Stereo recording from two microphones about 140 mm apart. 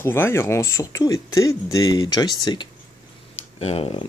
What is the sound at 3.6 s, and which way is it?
Speech, 45° left (ahead or behind).